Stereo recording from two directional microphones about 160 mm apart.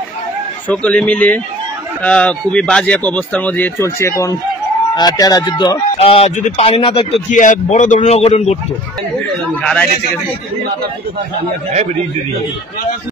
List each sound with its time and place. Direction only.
0.7 s speech: 10° left (ahead or behind); by 5.8 s 25° left (ahead or behind)
5.9 s speech: 40° left (ahead or behind)
7.2 s a man's voice: 55° left (ahead or behind)
9.3 s a man's voice: 5° left (ahead or behind)